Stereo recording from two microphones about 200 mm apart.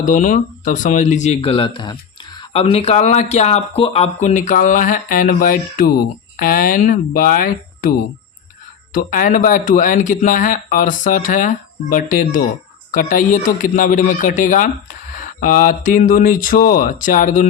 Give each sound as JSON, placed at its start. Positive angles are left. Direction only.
{"t": 0.0, "sound": "speech", "side_deg": 40}